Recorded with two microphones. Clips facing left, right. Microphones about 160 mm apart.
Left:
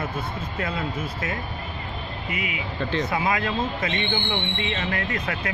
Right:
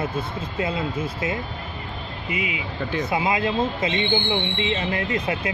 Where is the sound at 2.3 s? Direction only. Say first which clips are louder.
Right 3 dB; 20° right (ahead or behind).